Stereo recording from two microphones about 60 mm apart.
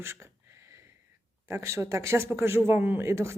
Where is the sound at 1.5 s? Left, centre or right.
Right.